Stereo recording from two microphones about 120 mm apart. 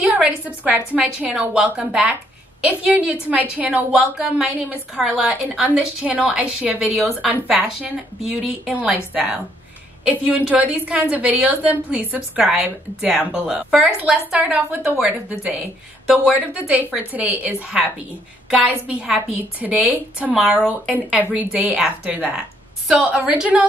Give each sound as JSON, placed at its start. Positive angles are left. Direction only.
{"t": 0.0, "sound": "a woman's voice", "side_deg": -10}
{"t": 10.4, "sound": "a woman's voice", "side_deg": -10}